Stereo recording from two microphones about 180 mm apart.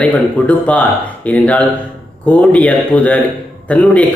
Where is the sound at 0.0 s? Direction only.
5° left (ahead or behind).